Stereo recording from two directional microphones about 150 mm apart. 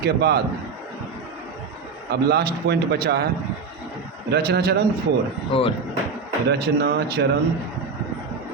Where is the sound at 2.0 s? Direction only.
90° right.